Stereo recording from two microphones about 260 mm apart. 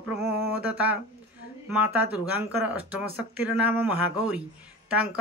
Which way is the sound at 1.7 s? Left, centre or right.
Centre.